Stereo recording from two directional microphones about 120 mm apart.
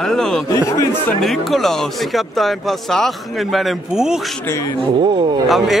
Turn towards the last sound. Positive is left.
turn(degrees=0)  # may be behind; listen again after turning